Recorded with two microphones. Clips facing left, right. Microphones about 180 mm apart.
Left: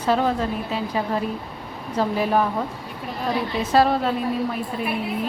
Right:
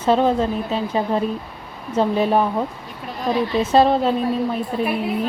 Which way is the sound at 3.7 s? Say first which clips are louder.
Right 3 dB; 25° right (ahead or behind).